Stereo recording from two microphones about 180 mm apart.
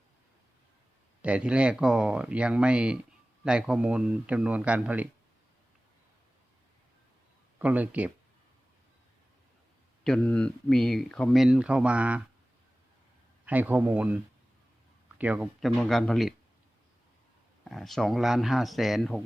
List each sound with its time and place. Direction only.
1.2 s a man's voice: 5° right (ahead or behind)
7.6 s a man's voice: 10° right (ahead or behind)
10.0 s speech: 5° left (ahead or behind)
13.4 s a man's voice: 10° right (ahead or behind)
15.2 s speech: 5° right (ahead or behind)
17.7 s speech: centre (ahead or behind)